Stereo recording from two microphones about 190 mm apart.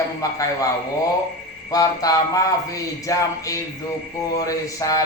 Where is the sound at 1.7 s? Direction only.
20° left (ahead or behind).